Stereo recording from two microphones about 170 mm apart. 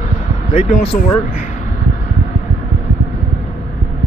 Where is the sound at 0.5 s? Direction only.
35° left (ahead or behind).